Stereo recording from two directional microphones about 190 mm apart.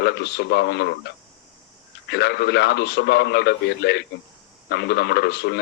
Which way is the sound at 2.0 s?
60° left (ahead or behind).